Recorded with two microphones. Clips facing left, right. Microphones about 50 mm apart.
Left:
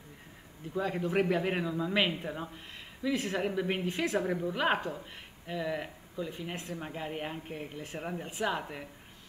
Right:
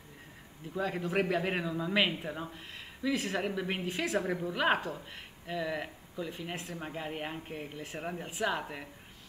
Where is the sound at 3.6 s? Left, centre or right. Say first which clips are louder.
Left 2 dB; centre.